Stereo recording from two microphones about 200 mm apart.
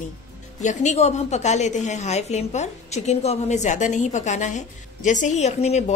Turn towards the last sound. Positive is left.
turn(degrees=35)  # may be behind; listen again after turning